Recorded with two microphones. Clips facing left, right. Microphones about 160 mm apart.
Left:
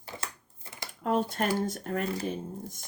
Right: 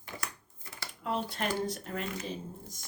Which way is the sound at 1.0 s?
45° left (ahead or behind).